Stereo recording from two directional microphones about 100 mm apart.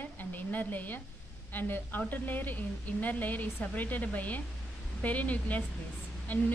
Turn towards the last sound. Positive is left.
turn(degrees=20)  # may be behind; listen again after turning